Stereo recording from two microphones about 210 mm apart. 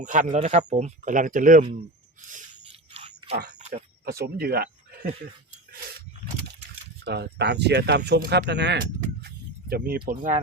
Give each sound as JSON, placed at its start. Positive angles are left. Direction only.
{"t": 0.0, "sound": "speech", "side_deg": -35}
{"t": 2.9, "sound": "a sound", "side_deg": -30}
{"t": 3.3, "sound": "speech", "side_deg": -40}
{"t": 4.0, "sound": "speech", "side_deg": -45}
{"t": 7.0, "sound": "speech", "side_deg": -55}